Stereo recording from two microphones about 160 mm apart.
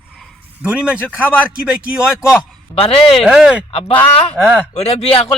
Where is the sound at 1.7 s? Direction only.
5° right (ahead or behind).